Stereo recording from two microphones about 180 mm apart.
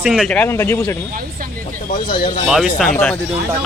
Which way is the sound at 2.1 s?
55° left (ahead or behind).